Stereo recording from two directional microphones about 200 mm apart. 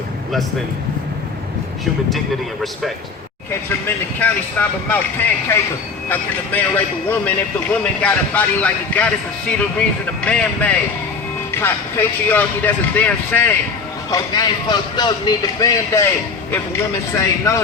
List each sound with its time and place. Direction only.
3.8 s a man's voice: 10° left (ahead or behind)
10.2 s a man's voice: 5° left (ahead or behind)
14.1 s speech: 20° left (ahead or behind)
17.2 s a man's voice: 15° left (ahead or behind)